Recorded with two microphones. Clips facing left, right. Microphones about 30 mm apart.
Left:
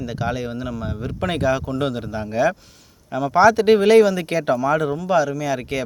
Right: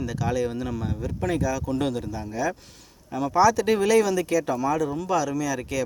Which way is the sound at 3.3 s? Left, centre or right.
Left.